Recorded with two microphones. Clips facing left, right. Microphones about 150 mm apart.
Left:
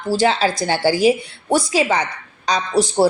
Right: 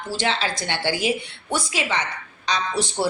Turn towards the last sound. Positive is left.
turn(degrees=40)  # may be behind; listen again after turning